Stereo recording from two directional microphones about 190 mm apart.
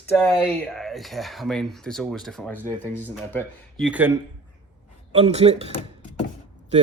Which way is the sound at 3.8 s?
10° right (ahead or behind).